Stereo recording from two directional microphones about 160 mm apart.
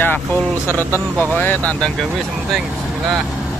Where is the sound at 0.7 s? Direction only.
15° right (ahead or behind).